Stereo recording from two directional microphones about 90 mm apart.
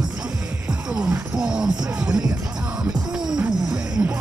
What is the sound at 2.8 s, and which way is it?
Music, 5° right (ahead or behind).